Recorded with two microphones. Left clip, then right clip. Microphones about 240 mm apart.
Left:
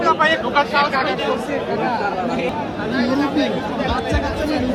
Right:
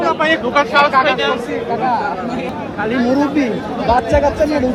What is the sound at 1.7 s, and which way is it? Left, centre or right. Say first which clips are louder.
Speech: right 5 dB; centre.